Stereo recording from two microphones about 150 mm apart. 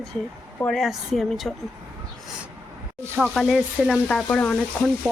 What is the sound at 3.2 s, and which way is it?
A woman's voice, centre (ahead or behind).